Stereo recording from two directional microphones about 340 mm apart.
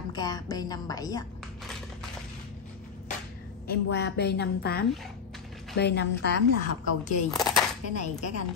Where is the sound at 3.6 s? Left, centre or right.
Left.